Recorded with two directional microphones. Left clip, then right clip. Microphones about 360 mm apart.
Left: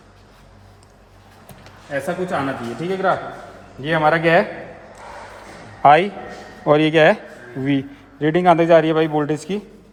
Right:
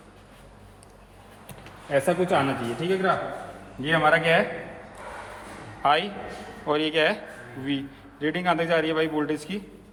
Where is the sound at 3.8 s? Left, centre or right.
Left.